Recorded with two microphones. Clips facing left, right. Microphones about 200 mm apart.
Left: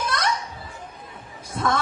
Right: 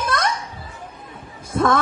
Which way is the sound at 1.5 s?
55° right (ahead or behind).